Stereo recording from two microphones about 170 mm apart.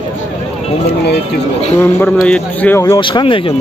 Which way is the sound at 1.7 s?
10° left (ahead or behind).